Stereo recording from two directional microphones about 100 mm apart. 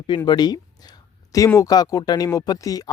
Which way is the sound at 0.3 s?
45° left (ahead or behind).